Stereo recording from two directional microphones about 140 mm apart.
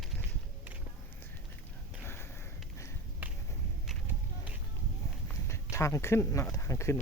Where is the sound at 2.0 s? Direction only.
15° left (ahead or behind).